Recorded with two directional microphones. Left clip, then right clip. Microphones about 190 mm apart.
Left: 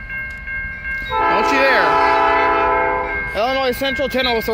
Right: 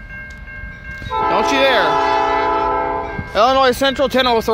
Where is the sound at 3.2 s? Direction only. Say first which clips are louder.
Right 9 dB; 20° right (ahead or behind).